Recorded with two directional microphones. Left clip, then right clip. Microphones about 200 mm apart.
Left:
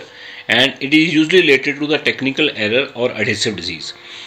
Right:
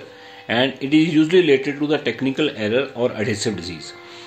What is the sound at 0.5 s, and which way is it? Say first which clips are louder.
Speech: left 5 dB; 10° left (ahead or behind).